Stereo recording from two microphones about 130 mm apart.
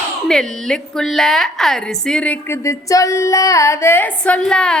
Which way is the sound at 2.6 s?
25° left (ahead or behind).